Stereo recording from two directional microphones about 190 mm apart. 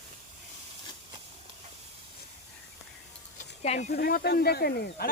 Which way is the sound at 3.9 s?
50° left (ahead or behind).